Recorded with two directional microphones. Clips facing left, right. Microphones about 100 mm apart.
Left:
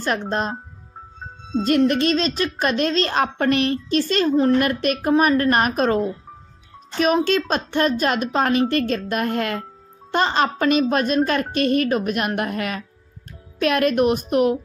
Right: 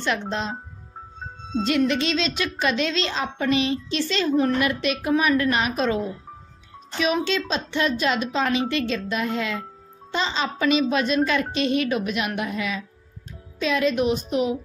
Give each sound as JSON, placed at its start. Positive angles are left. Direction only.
{"t": 0.0, "sound": "a woman's voice", "side_deg": 45}
{"t": 1.9, "sound": "a woman's voice", "side_deg": 50}
{"t": 7.2, "sound": "a woman's voice", "side_deg": 50}